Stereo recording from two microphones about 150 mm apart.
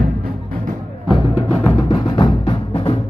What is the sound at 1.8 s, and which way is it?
Music, 35° left (ahead or behind).